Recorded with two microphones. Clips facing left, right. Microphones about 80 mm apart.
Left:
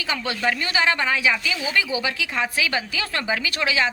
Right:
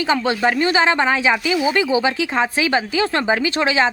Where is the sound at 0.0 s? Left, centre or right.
Right.